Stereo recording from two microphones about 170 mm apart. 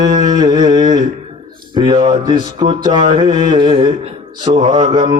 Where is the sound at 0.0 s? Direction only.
25° right (ahead or behind).